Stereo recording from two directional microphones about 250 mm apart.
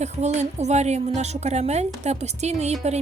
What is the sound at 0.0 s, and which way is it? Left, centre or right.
Speech, right.